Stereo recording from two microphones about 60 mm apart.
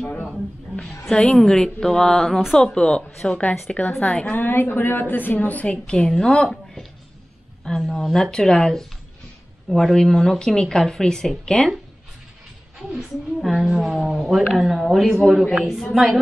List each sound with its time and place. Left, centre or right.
0.1 s music: centre
1.1 s a woman's voice: centre
4.5 s a woman's voice: left; by 8.8 s centre
9.7 s speech: centre
12.7 s a woman's voice: centre